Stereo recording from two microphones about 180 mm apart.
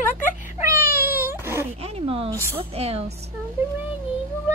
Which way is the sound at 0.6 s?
15° right (ahead or behind).